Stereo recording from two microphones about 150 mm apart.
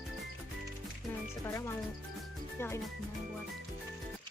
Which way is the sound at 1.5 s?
20° left (ahead or behind).